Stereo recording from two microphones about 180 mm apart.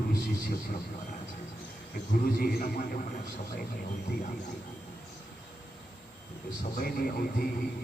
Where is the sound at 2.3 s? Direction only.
55° left (ahead or behind).